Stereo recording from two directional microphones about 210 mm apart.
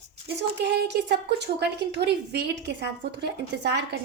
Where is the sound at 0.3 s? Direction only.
55° right (ahead or behind).